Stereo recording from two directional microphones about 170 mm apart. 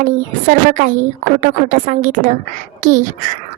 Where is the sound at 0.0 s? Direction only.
50° right (ahead or behind).